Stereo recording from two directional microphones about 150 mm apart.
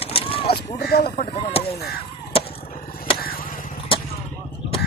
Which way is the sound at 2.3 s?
40° left (ahead or behind).